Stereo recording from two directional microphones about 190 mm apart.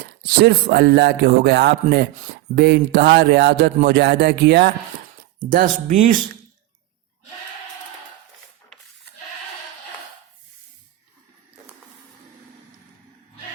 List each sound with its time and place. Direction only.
0.0 s speech: 60° right (ahead or behind)
5.4 s speech: 45° right (ahead or behind)